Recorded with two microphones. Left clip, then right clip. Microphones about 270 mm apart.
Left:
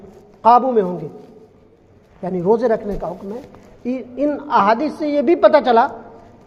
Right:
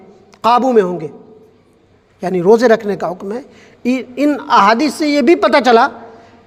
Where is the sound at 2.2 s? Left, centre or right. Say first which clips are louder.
Right 7 dB; right.